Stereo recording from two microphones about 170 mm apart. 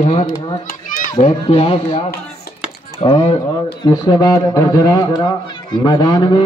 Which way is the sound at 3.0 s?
35° left (ahead or behind).